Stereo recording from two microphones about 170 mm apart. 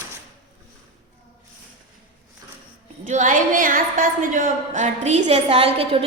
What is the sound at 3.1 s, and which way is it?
A woman's voice, 50° right (ahead or behind).